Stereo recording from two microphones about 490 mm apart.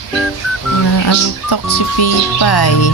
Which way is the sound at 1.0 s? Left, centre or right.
Left.